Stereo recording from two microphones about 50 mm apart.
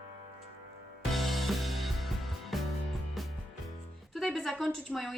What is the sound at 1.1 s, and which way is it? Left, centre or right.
Music, centre.